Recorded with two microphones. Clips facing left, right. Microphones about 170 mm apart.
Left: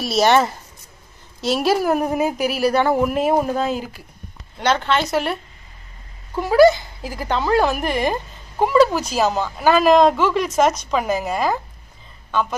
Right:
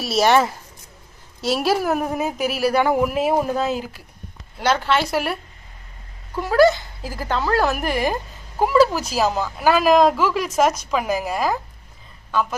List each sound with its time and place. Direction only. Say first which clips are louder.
0.0 s a woman's voice: left 1 dB; 5° right (ahead or behind)
6.4 s a woman's voice: left 3 dB; centre (ahead or behind)